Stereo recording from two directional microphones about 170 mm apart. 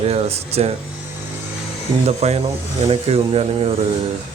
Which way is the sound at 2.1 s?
40° right (ahead or behind).